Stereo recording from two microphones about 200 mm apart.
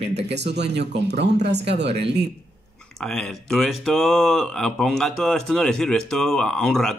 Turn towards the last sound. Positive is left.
turn(degrees=5)  # may be behind; listen again after turning